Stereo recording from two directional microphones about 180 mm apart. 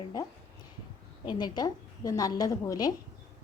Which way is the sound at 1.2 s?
25° left (ahead or behind).